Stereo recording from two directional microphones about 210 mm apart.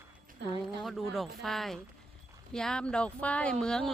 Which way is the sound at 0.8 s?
Centre (ahead or behind).